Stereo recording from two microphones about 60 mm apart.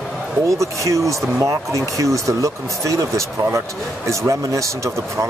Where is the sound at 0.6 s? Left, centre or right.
Right.